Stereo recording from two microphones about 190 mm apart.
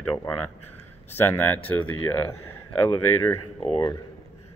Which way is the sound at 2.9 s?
25° left (ahead or behind).